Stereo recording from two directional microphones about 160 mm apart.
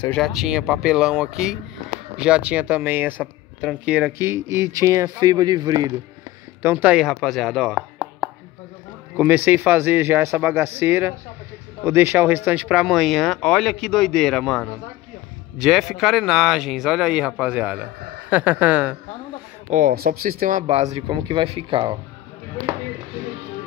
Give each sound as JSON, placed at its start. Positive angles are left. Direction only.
{"t": 0.1, "sound": "speech", "side_deg": 0}
{"t": 6.6, "sound": "speech", "side_deg": -10}
{"t": 19.7, "sound": "speech", "side_deg": -60}
{"t": 21.1, "sound": "speech", "side_deg": -30}